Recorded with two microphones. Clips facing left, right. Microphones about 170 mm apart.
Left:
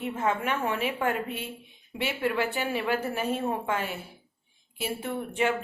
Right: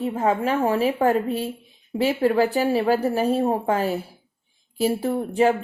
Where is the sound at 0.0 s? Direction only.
35° right (ahead or behind).